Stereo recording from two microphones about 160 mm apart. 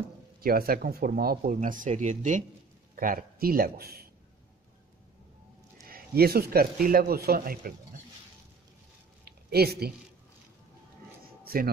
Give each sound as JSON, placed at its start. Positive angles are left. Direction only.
{"t": 0.4, "sound": "speech", "side_deg": -70}
{"t": 3.0, "sound": "speech", "side_deg": -60}
{"t": 5.9, "sound": "speech", "side_deg": -70}
{"t": 9.2, "sound": "a sound", "side_deg": -80}
{"t": 11.4, "sound": "speech", "side_deg": -65}